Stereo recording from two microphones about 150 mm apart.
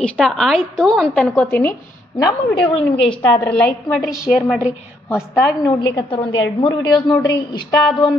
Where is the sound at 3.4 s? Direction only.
5° left (ahead or behind).